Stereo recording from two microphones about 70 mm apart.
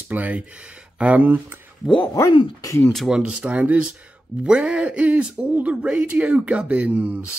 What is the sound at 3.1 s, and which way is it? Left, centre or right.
Speech, centre.